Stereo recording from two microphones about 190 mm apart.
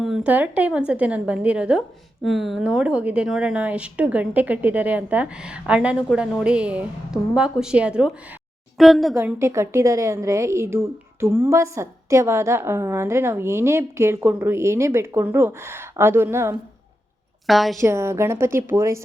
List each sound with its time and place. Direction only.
0.0 s a woman's voice: 5° right (ahead or behind)
9.1 s a woman's voice: 15° right (ahead or behind)
17.4 s a woman's voice: centre (ahead or behind)
17.7 s a woman's voice: 15° right (ahead or behind)